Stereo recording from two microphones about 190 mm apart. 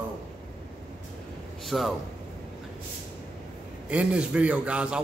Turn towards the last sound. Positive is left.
turn(degrees=-5)  # may be behind; listen again after turning